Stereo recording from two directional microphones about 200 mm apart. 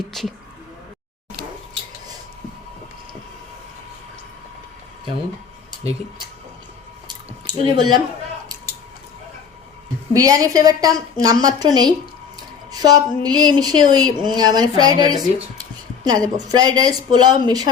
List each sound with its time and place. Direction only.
0.0 s speech: centre (ahead or behind)
5.8 s speech: 30° right (ahead or behind)
7.4 s speech: 20° right (ahead or behind)
10.1 s a woman's voice: 15° right (ahead or behind)